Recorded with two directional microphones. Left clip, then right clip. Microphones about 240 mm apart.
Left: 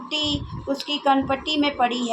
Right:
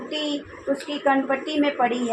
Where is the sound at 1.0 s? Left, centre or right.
Centre.